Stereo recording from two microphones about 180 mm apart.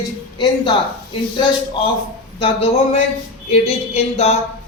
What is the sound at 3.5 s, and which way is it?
Speech, 35° left (ahead or behind).